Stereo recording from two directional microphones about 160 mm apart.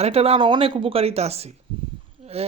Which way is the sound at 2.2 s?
40° right (ahead or behind).